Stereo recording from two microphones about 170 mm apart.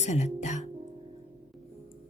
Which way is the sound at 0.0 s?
45° left (ahead or behind).